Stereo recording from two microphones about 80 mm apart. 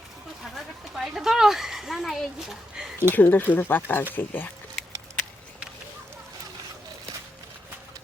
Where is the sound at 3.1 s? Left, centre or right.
Left.